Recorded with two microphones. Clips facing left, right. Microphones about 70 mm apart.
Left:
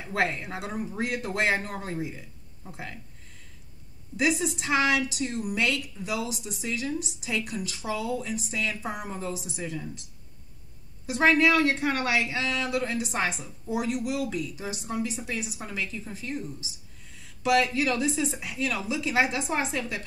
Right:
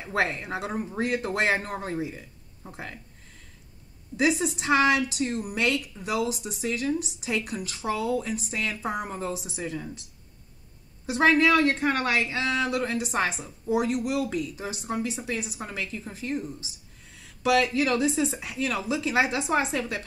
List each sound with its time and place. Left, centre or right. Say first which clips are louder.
0.1 s a woman's voice: right 1 dB; right
4.6 s speech: right 3 dB; right
11.1 s a woman's voice: right 1 dB; right